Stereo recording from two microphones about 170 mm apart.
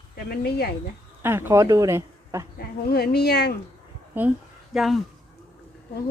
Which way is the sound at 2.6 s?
70° left (ahead or behind).